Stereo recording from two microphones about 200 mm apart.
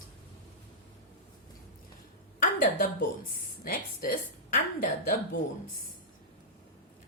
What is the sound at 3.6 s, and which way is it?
Speech, 45° left (ahead or behind).